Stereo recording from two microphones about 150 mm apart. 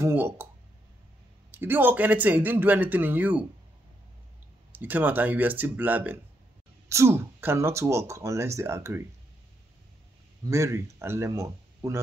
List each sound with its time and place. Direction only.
0.0 s speech: 15° right (ahead or behind)
1.5 s speech: 15° right (ahead or behind)
4.7 s speech: 10° right (ahead or behind)
10.4 s speech: 20° right (ahead or behind)